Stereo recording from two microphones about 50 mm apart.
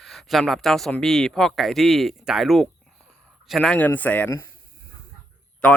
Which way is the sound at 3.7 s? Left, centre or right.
Left.